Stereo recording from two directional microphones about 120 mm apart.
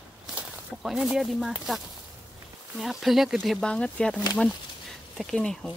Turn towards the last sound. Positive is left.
turn(degrees=5)  # may be behind; listen again after turning